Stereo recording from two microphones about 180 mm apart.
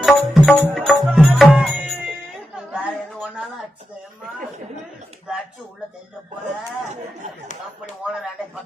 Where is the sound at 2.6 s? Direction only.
Centre (ahead or behind).